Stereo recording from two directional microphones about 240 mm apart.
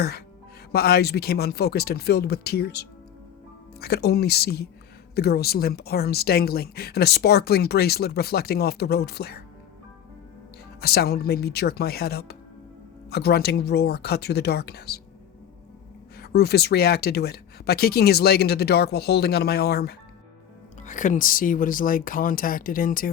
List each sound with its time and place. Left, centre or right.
0.7 s a woman's voice: left
10.8 s a woman's voice: left
16.1 s a woman's voice: left